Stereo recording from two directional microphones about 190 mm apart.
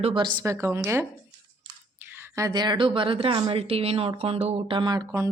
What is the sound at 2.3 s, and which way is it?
Speech, 20° right (ahead or behind).